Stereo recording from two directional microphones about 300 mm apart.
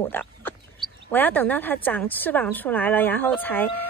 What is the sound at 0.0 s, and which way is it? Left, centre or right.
A woman's voice, centre.